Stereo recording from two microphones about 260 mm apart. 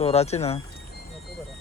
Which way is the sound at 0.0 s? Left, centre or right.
Left.